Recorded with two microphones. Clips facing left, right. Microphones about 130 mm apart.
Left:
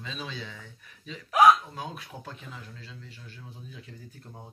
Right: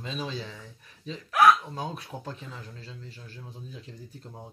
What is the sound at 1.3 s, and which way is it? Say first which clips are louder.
Speech: left 1 dB; 15° left (ahead or behind).